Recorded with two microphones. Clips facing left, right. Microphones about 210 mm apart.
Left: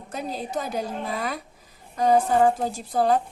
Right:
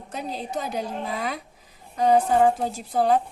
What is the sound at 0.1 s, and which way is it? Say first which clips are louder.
A woman's voice: left 1 dB; 45° left (ahead or behind).